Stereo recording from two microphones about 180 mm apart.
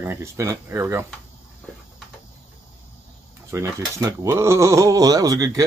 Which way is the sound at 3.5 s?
15° right (ahead or behind).